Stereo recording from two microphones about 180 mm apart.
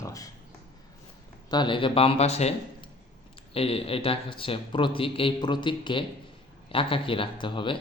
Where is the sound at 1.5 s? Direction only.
25° left (ahead or behind).